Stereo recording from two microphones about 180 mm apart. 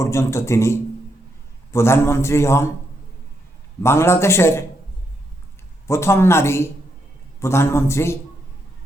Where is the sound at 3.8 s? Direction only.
15° left (ahead or behind).